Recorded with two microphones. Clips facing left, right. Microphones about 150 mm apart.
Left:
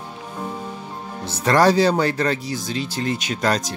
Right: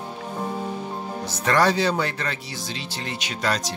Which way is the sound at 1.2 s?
35° left (ahead or behind).